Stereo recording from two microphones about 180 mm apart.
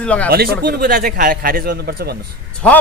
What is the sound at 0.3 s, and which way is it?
Speech, 55° right (ahead or behind).